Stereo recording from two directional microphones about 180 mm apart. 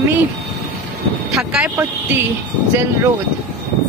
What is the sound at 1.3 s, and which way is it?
Speech, 5° right (ahead or behind).